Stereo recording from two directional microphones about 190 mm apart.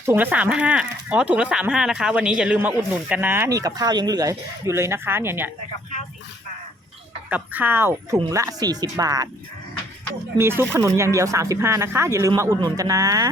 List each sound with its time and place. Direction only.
0.0 s speech: 10° right (ahead or behind)
7.3 s speech: 10° right (ahead or behind)
10.3 s speech: 10° right (ahead or behind)